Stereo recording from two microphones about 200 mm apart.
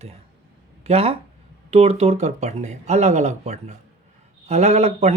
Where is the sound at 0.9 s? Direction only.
30° right (ahead or behind).